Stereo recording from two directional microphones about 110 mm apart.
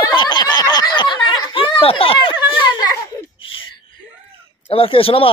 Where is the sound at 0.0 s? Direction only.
45° left (ahead or behind).